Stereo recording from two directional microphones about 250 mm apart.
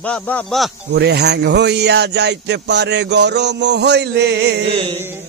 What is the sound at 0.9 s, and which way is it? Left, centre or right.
A man's voice, right.